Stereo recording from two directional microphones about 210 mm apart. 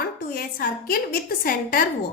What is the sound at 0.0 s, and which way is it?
A woman's voice, 45° left (ahead or behind).